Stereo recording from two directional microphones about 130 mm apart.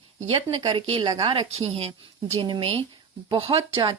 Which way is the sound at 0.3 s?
40° right (ahead or behind).